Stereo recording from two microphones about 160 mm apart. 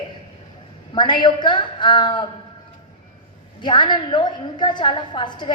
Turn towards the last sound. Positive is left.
turn(degrees=30)  # may be behind; listen again after turning